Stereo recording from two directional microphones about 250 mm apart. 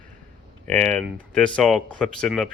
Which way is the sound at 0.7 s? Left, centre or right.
Centre.